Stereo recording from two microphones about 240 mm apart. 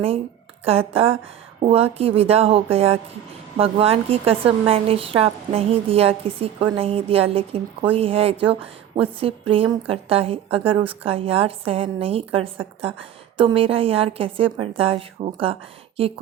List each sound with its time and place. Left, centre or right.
0.6 s a woman's voice: right